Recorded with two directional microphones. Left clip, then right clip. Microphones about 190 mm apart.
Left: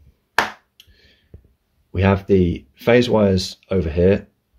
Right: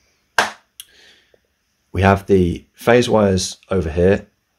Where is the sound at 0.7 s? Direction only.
30° right (ahead or behind).